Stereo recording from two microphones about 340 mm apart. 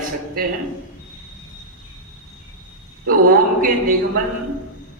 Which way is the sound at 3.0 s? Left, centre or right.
Right.